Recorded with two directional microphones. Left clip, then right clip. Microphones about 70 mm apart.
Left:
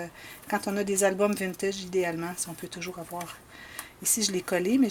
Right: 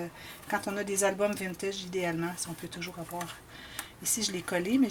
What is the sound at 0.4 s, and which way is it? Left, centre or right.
Speech, left.